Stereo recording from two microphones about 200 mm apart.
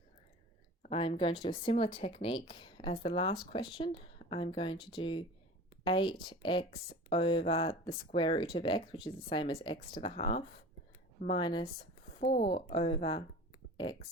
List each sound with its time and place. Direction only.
0.8 s speech: 30° left (ahead or behind)
12.2 s speech: 50° left (ahead or behind)
12.5 s speech: 25° left (ahead or behind)